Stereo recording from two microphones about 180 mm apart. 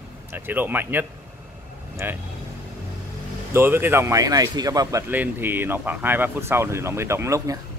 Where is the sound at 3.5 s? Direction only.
10° right (ahead or behind).